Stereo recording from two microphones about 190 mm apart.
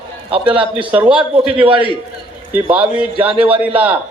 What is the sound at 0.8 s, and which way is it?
Speech, 10° right (ahead or behind).